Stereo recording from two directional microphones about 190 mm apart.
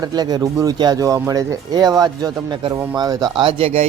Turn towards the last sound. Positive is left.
turn(degrees=-30)  # may be behind; listen again after turning